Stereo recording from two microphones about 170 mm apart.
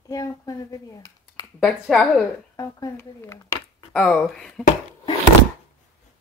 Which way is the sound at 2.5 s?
20° left (ahead or behind).